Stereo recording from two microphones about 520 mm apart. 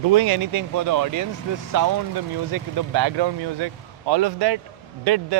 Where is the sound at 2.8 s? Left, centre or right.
Right.